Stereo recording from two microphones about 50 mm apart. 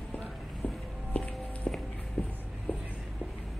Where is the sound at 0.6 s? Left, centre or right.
Left.